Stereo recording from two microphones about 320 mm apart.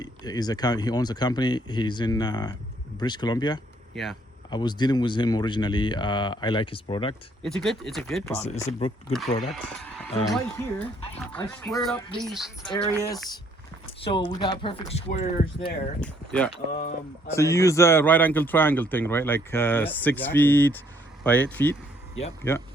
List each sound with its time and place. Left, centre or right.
0.0 s a man's voice: centre
3.9 s speech: centre
4.5 s a man's voice: centre
7.4 s speech: centre
8.3 s a man's voice: left
9.4 s speech: centre
12.7 s a man's voice: centre
16.0 s a man's voice: centre